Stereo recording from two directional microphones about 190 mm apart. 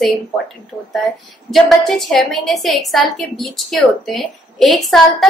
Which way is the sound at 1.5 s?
Centre (ahead or behind).